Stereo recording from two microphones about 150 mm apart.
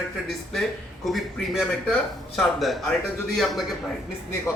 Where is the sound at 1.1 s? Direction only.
Centre (ahead or behind).